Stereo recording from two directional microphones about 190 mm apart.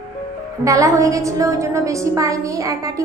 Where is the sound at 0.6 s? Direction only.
15° right (ahead or behind).